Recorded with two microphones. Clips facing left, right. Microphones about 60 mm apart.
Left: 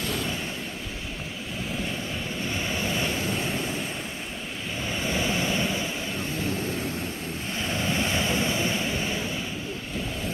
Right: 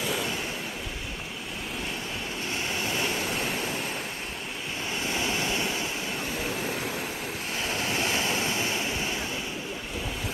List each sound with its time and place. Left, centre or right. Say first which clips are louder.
0.0 s a sound: even; centre
2.5 s vehicle: left 1 dB; centre
4.9 s vehicle: left 2 dB; centre
7.5 s waves: left 2 dB; centre